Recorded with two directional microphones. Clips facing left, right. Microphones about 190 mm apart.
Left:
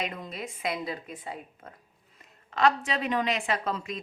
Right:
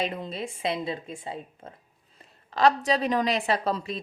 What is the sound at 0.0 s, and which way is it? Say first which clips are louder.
A woman's voice: right 4 dB; 30° right (ahead or behind).